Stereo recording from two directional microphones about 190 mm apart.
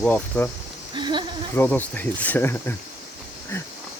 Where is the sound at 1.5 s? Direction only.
10° left (ahead or behind).